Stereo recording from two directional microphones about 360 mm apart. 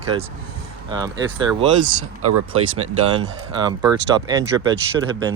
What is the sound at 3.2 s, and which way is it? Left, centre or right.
Speech, centre.